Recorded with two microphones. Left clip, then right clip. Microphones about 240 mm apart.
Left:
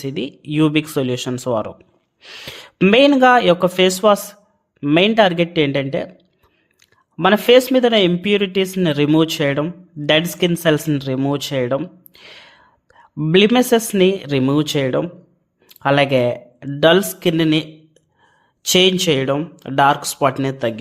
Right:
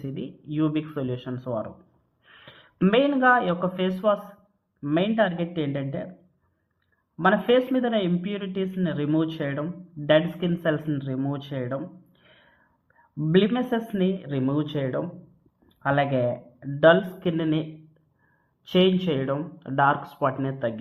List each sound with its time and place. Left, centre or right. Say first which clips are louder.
0.0 s speech: left 11 dB; left
7.2 s speech: left 9 dB; left
18.7 s speech: left 8 dB; left